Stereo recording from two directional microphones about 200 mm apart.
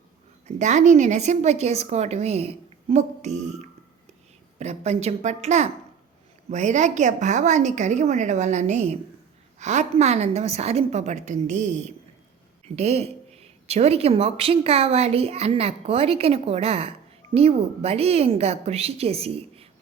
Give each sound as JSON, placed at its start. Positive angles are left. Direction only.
{"t": 0.4, "sound": "a woman's voice", "side_deg": -35}